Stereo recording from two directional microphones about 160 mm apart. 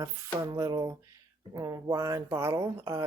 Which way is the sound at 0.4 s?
20° right (ahead or behind).